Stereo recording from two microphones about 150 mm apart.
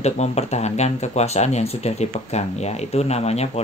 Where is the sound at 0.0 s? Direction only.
45° left (ahead or behind).